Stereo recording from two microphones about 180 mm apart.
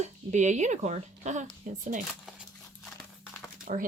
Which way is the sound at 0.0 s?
40° right (ahead or behind).